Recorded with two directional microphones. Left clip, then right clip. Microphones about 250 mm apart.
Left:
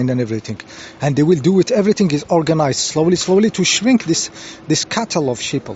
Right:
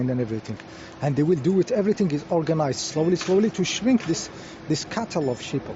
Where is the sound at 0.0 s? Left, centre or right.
Left.